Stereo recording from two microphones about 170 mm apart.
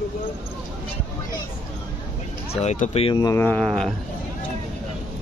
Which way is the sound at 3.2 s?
15° left (ahead or behind).